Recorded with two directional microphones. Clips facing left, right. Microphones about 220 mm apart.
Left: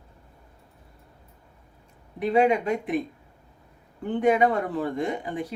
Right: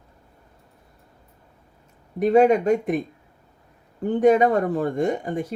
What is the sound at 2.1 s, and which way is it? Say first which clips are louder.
Speech: right 5 dB; 45° right (ahead or behind).